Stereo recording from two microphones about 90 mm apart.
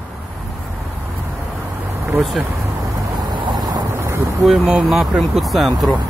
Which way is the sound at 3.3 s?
55° right (ahead or behind).